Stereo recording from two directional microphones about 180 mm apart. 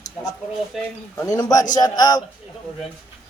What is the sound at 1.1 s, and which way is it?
A man's voice, 15° left (ahead or behind).